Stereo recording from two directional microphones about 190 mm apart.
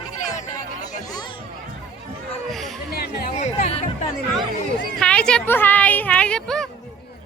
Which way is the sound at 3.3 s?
35° left (ahead or behind).